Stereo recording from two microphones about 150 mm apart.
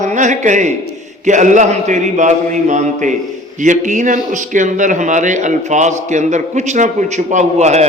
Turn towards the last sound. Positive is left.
turn(degrees=-50)  # may be behind; listen again after turning